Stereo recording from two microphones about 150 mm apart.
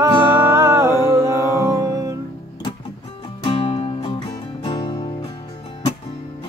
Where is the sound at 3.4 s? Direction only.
35° left (ahead or behind).